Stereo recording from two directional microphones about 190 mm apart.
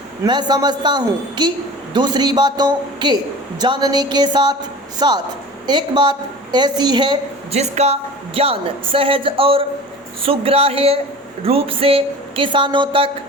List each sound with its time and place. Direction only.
0.3 s a woman's voice: 20° right (ahead or behind)